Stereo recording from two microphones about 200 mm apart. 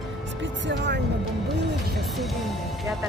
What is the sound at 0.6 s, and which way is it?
Speech, 60° right (ahead or behind).